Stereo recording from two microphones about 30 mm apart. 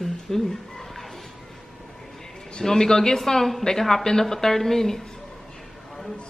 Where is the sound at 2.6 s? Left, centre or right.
Centre.